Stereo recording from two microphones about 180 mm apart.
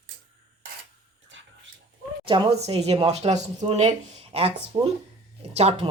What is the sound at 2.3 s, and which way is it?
A woman's voice, 25° right (ahead or behind).